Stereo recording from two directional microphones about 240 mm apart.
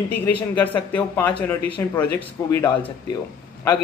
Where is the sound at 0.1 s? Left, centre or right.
Centre.